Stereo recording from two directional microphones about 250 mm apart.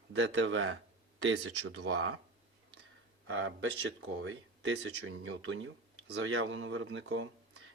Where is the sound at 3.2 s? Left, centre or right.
Right.